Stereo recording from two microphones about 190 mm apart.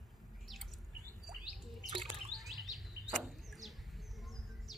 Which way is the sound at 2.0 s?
Centre (ahead or behind).